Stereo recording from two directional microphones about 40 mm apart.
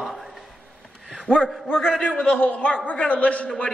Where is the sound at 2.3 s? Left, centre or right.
Left.